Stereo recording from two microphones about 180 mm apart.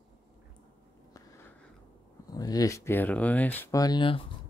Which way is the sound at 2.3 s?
20° left (ahead or behind).